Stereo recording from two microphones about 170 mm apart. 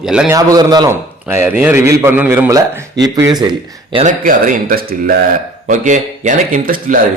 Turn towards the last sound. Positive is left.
turn(degrees=-55)  # may be behind; listen again after turning